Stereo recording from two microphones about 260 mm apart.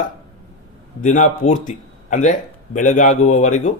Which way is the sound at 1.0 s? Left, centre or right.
Left.